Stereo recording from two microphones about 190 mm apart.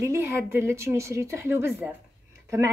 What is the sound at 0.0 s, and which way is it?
A woman's voice, 15° right (ahead or behind).